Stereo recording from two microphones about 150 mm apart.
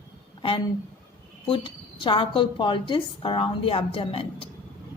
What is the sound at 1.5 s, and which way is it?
A woman's voice, 35° left (ahead or behind).